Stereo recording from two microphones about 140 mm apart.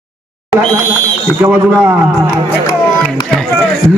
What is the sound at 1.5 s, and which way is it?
Speech, 10° right (ahead or behind).